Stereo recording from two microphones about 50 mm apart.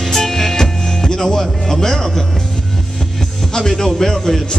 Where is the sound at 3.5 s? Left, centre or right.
Centre.